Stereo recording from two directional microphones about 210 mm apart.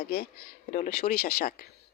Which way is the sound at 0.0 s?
50° left (ahead or behind).